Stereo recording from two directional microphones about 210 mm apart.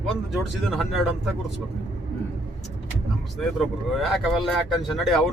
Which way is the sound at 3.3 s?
Centre (ahead or behind).